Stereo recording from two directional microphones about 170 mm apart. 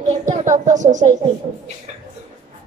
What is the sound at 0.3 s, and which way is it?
Speech, 45° right (ahead or behind).